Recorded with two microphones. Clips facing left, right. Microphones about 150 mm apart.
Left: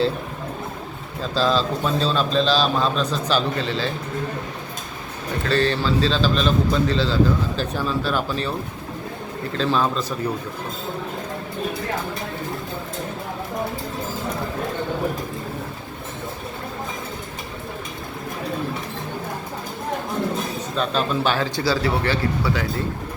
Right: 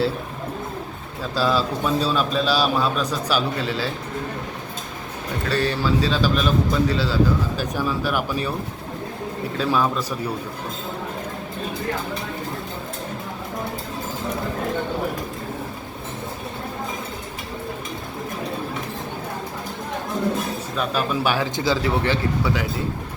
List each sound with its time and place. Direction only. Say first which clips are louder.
1.4 s a man's voice: left 1 dB; 10° right (ahead or behind)
5.5 s a man's voice: left 1 dB; 10° right (ahead or behind)
9.6 s a man's voice: even; 10° right (ahead or behind)
20.7 s a man's voice: left 1 dB; 10° right (ahead or behind)